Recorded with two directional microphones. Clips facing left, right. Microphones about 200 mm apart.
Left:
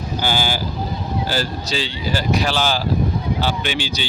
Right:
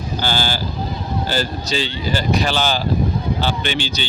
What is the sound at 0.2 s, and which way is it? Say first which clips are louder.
Speech: left 1 dB; 15° left (ahead or behind).